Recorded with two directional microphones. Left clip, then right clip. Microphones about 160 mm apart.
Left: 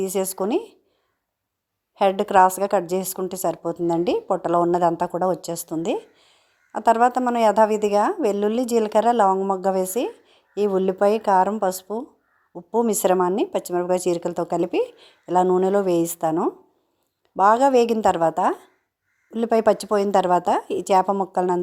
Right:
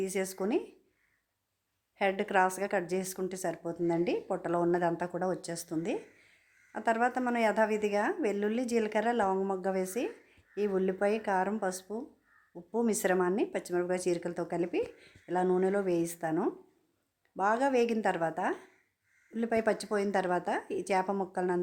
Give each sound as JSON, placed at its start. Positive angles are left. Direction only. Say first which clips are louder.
{"t": 0.0, "sound": "speech", "louder": "left 9 dB", "side_deg": 35}
{"t": 2.0, "sound": "speech", "louder": "left 12 dB", "side_deg": 40}